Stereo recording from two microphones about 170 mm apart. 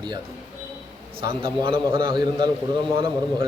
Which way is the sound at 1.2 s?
30° right (ahead or behind).